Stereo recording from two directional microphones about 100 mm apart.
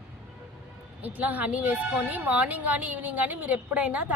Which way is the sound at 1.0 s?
15° right (ahead or behind).